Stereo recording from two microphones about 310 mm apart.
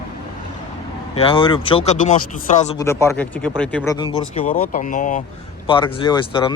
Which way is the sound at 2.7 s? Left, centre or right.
Centre.